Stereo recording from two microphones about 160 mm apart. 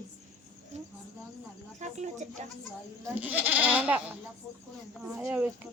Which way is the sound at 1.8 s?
45° right (ahead or behind).